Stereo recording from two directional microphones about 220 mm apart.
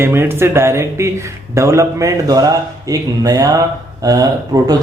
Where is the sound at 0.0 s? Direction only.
10° right (ahead or behind).